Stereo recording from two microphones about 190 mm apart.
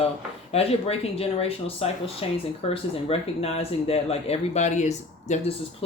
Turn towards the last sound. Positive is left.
turn(degrees=35)  # may be behind; listen again after turning